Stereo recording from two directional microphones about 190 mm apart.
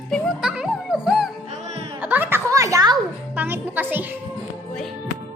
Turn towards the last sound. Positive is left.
turn(degrees=-10)  # may be behind; listen again after turning